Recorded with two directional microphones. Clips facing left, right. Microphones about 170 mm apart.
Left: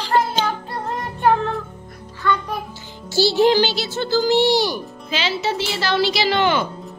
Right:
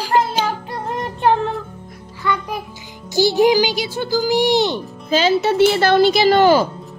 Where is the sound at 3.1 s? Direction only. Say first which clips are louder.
Right 2 dB; 15° right (ahead or behind).